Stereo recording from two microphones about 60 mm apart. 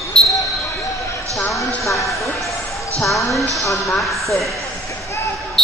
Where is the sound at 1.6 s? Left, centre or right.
Left.